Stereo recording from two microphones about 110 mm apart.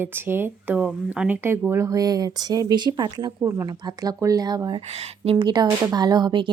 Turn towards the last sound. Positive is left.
turn(degrees=-45)  # may be behind; listen again after turning